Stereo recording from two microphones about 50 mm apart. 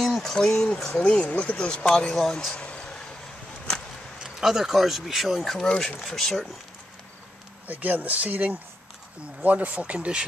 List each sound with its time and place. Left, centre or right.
0.2 s speech: centre
0.8 s speech: left
1.4 s speech: centre
2.5 s a sound: left
4.2 s speech: centre
5.4 s speech: centre
7.6 s speech: right